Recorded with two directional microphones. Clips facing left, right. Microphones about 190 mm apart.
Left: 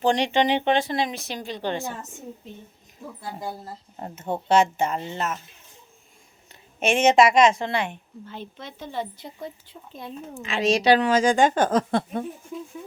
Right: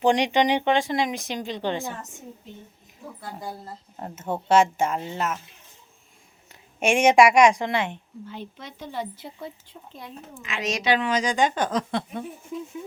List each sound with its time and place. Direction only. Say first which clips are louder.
0.0 s a woman's voice: right 1 dB; 15° right (ahead or behind)
4.4 s a woman's voice: right 1 dB; 5° right (ahead or behind)
6.7 s a woman's voice: right 1 dB; 10° right (ahead or behind)
10.0 s speech: left 4 dB; 20° left (ahead or behind)
10.4 s a woman's voice: left 6 dB; 30° left (ahead or behind); by 12.2 s 50° left (ahead or behind)